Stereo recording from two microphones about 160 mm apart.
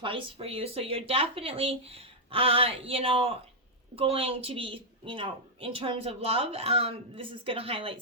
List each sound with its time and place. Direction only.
0.0 s a woman's voice: 35° right (ahead or behind)